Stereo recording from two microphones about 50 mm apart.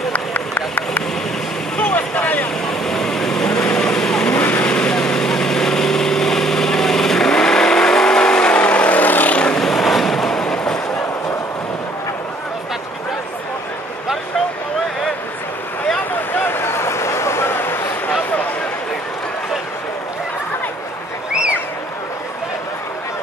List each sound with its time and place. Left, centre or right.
0.1 s run: left
1.8 s vehicle: left
2.6 s vehicle: centre
4.4 s vehicle: left
4.7 s vehicle: centre; by 9.4 s left
9.6 s a sound: centre
16.1 s a sound: left